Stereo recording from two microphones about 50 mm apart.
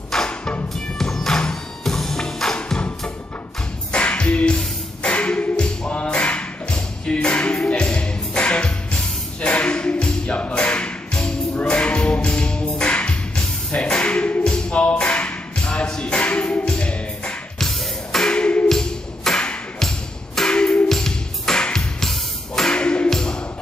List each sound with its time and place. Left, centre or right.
0.1 s music: centre
3.9 s music: left
14.4 s a sound: centre
17.6 s music: centre
18.3 s music: left
18.7 s music: centre
23.0 s a sound: centre